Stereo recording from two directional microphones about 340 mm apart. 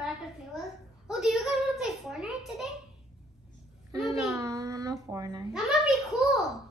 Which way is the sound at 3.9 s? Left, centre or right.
Centre.